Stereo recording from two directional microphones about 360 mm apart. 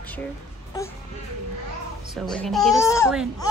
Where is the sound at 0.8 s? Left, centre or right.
Centre.